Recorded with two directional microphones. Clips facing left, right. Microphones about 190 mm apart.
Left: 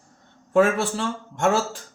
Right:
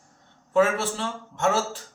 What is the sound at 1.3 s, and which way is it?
Speech, centre (ahead or behind).